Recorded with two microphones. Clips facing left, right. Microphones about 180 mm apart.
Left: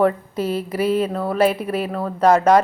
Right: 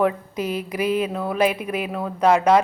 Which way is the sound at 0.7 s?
10° right (ahead or behind).